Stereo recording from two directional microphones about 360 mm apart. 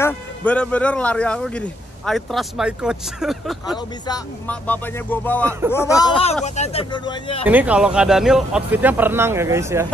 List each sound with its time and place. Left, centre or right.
0.0 s speech: centre
7.4 s speech: centre